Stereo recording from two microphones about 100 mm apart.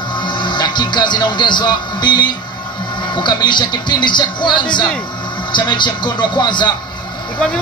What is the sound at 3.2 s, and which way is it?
Speech, 50° left (ahead or behind).